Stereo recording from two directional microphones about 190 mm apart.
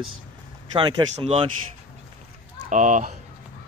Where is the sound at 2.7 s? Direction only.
40° right (ahead or behind).